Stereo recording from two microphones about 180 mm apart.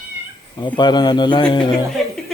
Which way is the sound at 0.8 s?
25° left (ahead or behind).